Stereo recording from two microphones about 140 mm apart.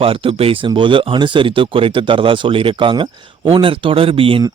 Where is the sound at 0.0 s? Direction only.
40° right (ahead or behind).